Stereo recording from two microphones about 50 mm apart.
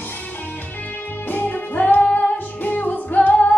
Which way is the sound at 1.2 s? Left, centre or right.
Left.